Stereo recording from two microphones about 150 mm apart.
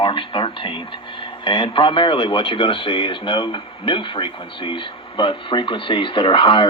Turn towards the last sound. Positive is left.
turn(degrees=35)  # may be behind; listen again after turning